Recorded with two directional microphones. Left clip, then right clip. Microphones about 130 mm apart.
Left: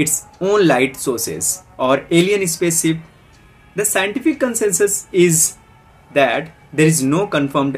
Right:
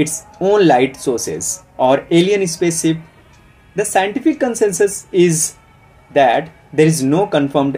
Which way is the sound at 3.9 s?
25° left (ahead or behind).